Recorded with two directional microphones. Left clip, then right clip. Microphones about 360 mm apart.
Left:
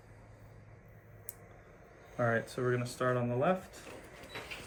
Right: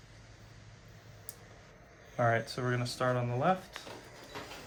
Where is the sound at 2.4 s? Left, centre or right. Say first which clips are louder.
Left 1 dB; right.